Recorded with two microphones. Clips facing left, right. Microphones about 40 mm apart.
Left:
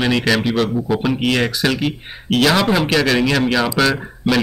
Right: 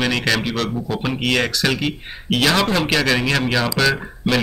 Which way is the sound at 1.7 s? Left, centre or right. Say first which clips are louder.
Left 2 dB; centre.